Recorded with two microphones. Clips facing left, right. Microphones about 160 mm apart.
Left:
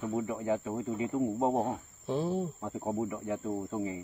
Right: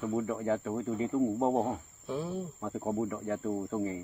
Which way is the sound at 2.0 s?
30° left (ahead or behind).